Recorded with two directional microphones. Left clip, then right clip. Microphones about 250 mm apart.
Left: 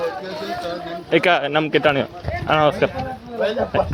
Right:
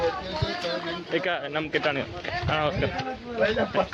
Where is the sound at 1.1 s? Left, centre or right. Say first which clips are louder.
Left 12 dB; left.